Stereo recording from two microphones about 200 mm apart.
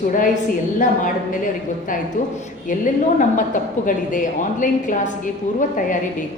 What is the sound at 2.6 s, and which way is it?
A woman's voice, 40° left (ahead or behind).